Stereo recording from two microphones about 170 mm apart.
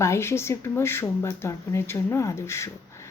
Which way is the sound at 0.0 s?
15° left (ahead or behind).